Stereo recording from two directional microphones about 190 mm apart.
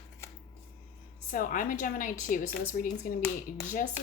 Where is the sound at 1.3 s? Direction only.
45° left (ahead or behind).